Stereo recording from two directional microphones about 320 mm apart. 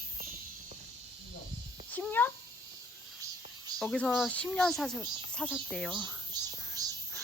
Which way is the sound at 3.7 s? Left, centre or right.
Centre.